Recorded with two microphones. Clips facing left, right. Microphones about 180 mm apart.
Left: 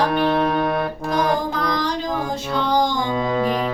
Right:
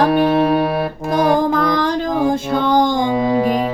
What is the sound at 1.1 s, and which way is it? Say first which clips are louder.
Music: right 7 dB; 50° right (ahead or behind).